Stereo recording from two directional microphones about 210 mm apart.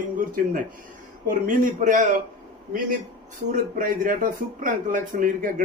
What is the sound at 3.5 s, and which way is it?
A man's voice, 40° right (ahead or behind).